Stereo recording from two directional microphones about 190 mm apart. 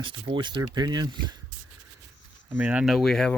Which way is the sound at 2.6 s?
5° right (ahead or behind).